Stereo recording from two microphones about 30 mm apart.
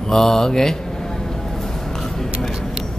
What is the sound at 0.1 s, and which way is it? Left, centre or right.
Speech, centre.